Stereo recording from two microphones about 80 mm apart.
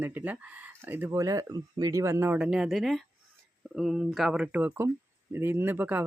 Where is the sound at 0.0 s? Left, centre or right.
Right.